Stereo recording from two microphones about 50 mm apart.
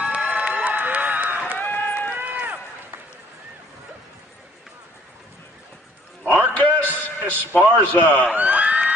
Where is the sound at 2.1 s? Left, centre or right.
Right.